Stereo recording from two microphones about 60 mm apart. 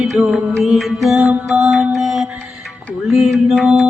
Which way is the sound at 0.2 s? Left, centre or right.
Centre.